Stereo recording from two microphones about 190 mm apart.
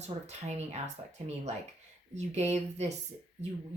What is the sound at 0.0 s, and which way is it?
Speech, 35° right (ahead or behind).